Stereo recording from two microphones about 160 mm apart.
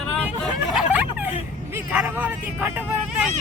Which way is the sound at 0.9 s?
10° right (ahead or behind).